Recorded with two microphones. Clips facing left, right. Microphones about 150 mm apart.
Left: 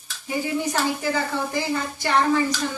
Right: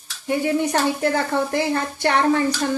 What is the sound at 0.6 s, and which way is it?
A woman's voice, 60° right (ahead or behind).